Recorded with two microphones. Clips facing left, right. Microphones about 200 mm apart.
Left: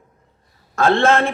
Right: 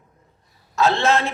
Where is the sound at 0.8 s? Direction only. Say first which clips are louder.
Left 3 dB; 55° left (ahead or behind).